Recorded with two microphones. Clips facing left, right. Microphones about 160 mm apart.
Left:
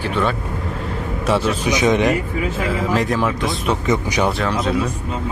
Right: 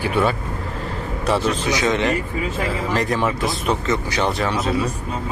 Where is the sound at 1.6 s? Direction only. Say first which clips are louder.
Left 3 dB; 15° left (ahead or behind).